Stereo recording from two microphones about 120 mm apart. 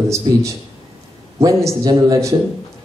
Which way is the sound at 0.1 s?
25° right (ahead or behind).